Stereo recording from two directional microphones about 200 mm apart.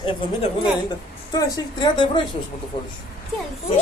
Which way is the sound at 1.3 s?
20° left (ahead or behind).